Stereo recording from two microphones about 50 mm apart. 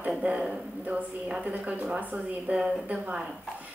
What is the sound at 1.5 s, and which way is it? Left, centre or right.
Speech, right.